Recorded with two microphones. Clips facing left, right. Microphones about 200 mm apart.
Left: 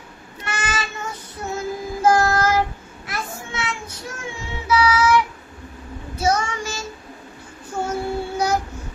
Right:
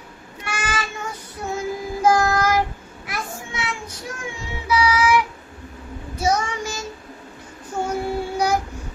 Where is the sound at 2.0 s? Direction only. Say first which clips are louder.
Left 1 dB; 15° right (ahead or behind).